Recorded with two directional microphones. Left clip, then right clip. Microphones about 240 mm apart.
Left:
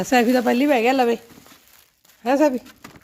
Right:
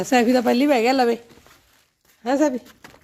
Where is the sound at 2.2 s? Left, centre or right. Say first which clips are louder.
Left 2 dB; centre.